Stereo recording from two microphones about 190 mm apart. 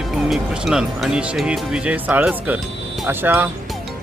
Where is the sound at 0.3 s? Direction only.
5° right (ahead or behind).